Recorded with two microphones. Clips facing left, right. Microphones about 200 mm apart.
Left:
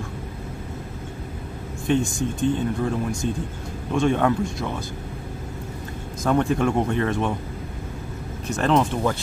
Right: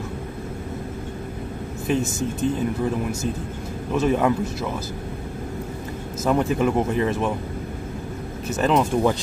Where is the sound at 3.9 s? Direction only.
5° right (ahead or behind).